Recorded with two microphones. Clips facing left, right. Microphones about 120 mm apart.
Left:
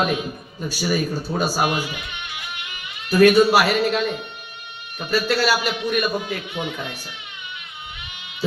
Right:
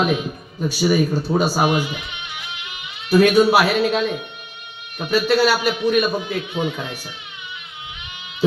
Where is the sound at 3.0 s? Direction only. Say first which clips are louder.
Even; 15° right (ahead or behind).